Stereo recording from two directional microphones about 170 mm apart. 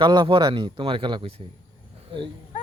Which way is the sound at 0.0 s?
25° right (ahead or behind).